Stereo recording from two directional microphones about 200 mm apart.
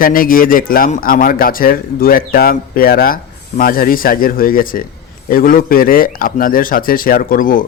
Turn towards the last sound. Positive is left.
turn(degrees=45)  # may be behind; listen again after turning